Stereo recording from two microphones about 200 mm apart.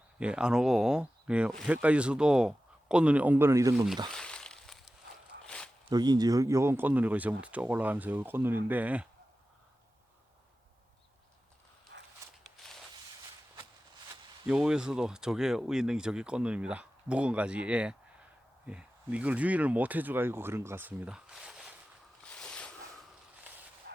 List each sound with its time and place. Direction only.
0.2 s speech: 5° right (ahead or behind)
4.1 s a sound: 5° left (ahead or behind)
5.9 s speech: 20° right (ahead or behind)
11.9 s walk: 65° right (ahead or behind)
14.4 s speech: 5° right (ahead or behind)
22.2 s boat: 5° left (ahead or behind)
23.9 s vehicle: 55° right (ahead or behind)